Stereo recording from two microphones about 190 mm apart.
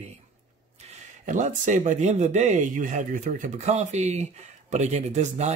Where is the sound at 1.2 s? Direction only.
40° right (ahead or behind).